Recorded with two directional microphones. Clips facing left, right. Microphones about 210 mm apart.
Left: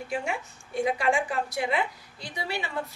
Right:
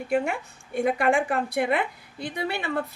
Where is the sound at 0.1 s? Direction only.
55° right (ahead or behind).